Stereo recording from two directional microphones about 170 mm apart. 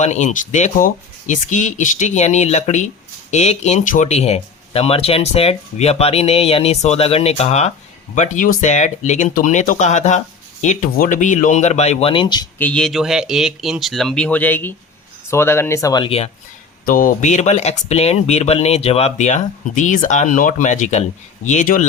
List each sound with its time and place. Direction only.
0.0 s speech: 45° left (ahead or behind); by 12.5 s 25° left (ahead or behind)
12.5 s speech: 10° left (ahead or behind); by 16.3 s 35° left (ahead or behind)
16.8 s speech: 55° left (ahead or behind)